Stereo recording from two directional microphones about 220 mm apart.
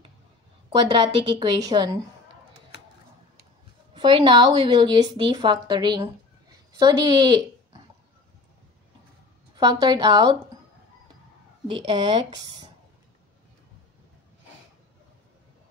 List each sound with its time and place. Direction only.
0.7 s a woman's voice: 25° right (ahead or behind)
3.9 s a woman's voice: 20° right (ahead or behind)
9.6 s a woman's voice: 20° right (ahead or behind)
11.6 s a woman's voice: 25° right (ahead or behind)